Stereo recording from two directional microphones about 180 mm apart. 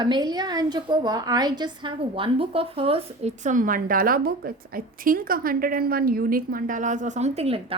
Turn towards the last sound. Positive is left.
turn(degrees=-35)  # may be behind; listen again after turning